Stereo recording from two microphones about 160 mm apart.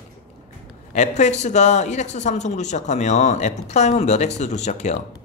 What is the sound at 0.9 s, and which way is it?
Speech, 50° left (ahead or behind).